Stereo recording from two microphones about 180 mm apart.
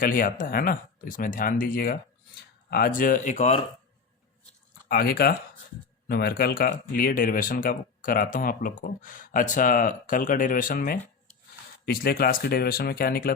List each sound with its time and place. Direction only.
0.0 s speech: 50° left (ahead or behind)
4.9 s speech: 60° left (ahead or behind)